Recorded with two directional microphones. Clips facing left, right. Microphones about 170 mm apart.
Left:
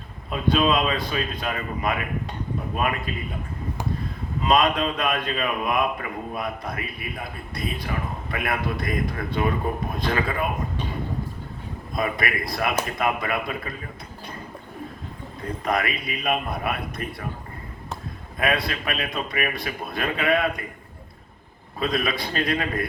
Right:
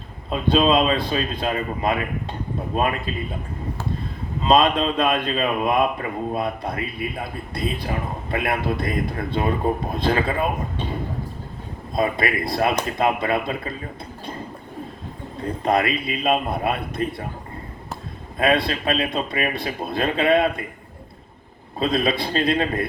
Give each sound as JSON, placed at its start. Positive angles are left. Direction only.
{"t": 0.3, "sound": "speech", "side_deg": -30}
{"t": 4.4, "sound": "speech", "side_deg": -30}
{"t": 11.9, "sound": "speech", "side_deg": -25}
{"t": 15.6, "sound": "speech", "side_deg": -30}
{"t": 18.3, "sound": "speech", "side_deg": -30}
{"t": 21.8, "sound": "speech", "side_deg": -30}